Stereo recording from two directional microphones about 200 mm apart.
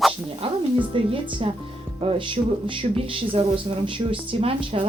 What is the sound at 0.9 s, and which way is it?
A woman's voice, 25° right (ahead or behind).